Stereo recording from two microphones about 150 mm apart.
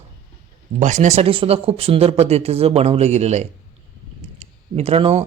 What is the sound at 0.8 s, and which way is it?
Speech, 55° right (ahead or behind).